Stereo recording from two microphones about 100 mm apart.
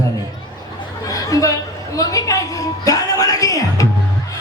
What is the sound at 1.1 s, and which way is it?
A woman's voice, 35° left (ahead or behind).